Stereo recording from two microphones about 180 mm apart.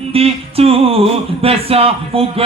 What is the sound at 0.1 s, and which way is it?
Speech, 35° right (ahead or behind).